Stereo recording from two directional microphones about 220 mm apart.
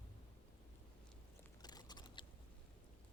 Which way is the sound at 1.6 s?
20° left (ahead or behind).